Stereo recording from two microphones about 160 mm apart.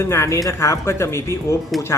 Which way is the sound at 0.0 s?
15° left (ahead or behind).